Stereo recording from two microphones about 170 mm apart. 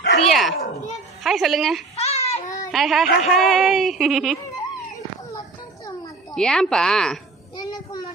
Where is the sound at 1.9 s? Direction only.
40° left (ahead or behind).